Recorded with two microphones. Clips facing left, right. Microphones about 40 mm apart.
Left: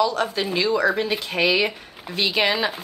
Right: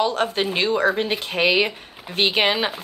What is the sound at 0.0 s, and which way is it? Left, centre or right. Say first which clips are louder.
Speech: right 1 dB; right.